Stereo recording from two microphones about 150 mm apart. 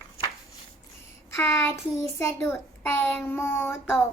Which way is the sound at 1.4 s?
15° left (ahead or behind).